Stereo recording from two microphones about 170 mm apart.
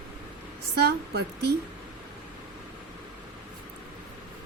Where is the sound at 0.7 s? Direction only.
75° right (ahead or behind).